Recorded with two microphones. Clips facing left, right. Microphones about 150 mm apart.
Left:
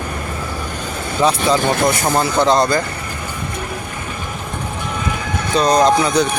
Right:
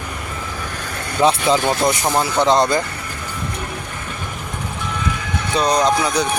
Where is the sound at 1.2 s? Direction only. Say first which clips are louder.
Even; 20° right (ahead or behind).